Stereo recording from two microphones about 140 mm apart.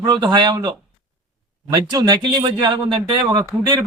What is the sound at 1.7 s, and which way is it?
Speech, 30° right (ahead or behind).